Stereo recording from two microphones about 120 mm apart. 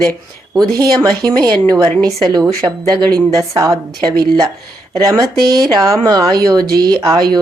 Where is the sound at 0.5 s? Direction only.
35° right (ahead or behind).